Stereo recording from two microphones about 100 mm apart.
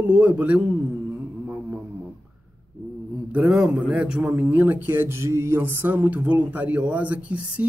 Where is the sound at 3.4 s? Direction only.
5° right (ahead or behind).